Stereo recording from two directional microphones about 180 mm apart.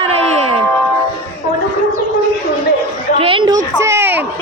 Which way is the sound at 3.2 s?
30° right (ahead or behind).